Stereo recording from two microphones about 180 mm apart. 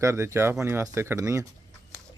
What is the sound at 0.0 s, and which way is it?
A man's voice, 15° right (ahead or behind).